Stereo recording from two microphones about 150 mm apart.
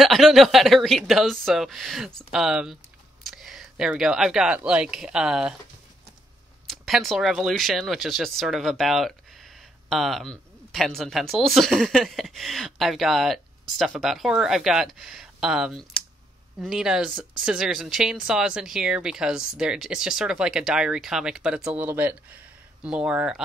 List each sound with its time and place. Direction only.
0.0 s speech: centre (ahead or behind)
6.7 s speech: centre (ahead or behind)